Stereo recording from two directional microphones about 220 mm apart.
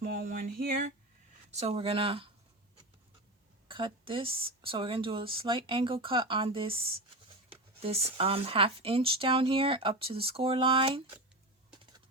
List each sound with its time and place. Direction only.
0.0 s a sound: 35° right (ahead or behind)
1.5 s speech: 25° right (ahead or behind)
3.7 s speech: 25° right (ahead or behind)
11.7 s typing: 20° right (ahead or behind)